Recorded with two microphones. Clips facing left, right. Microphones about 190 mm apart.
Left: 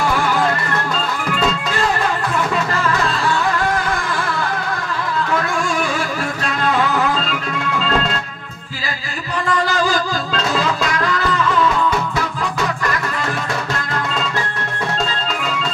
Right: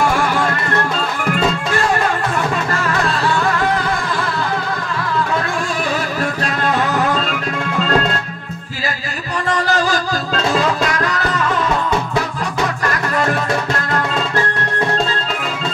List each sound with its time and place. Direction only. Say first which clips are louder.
9.7 s music: right 1 dB; 45° right (ahead or behind)